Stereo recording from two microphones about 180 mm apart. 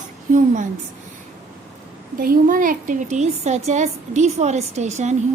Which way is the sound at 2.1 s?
55° right (ahead or behind).